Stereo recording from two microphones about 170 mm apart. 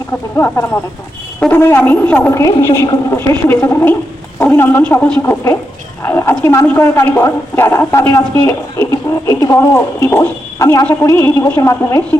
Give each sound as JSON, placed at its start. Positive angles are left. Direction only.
{"t": 0.3, "sound": "speech", "side_deg": 15}